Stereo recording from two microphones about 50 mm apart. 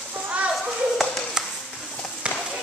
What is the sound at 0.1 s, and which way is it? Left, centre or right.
Children playing, right.